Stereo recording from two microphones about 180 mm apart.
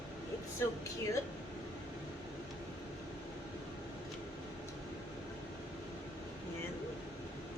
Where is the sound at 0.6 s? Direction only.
15° left (ahead or behind).